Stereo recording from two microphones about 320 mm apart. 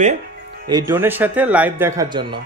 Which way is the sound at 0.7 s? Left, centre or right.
Centre.